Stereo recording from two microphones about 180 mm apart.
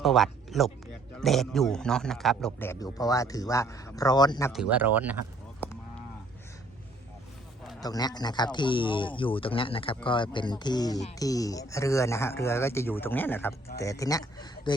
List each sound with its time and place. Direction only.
0.0 s a man's voice: centre (ahead or behind)
2.6 s speech: 15° left (ahead or behind)
4.5 s speech: 10° right (ahead or behind)
7.8 s speech: 20° left (ahead or behind)